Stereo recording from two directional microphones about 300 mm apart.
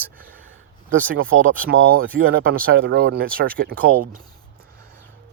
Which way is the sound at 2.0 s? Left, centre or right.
Right.